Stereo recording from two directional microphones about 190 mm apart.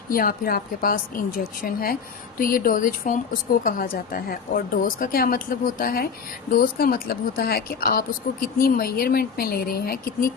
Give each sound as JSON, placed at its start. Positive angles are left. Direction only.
{"t": 0.1, "sound": "speech", "side_deg": 50}